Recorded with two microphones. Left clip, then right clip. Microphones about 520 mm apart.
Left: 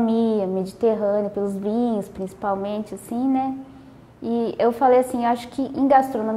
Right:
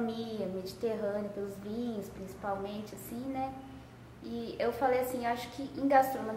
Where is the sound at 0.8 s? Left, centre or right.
Left.